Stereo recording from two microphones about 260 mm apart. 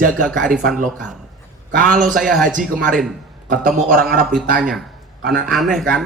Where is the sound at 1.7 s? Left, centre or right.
Right.